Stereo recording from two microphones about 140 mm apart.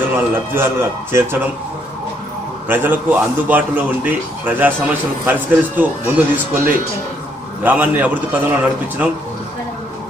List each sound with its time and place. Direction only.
0.3 s a man's voice: 15° right (ahead or behind)
2.7 s a man's voice: 15° right (ahead or behind)